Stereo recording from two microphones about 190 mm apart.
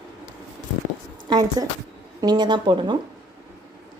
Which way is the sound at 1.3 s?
20° right (ahead or behind).